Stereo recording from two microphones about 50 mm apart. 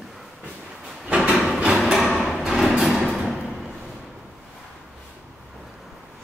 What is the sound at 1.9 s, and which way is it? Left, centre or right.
Music, centre.